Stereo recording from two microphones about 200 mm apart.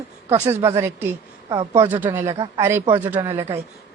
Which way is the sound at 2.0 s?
15° right (ahead or behind).